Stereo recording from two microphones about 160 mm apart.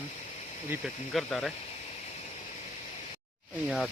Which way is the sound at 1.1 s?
Centre (ahead or behind).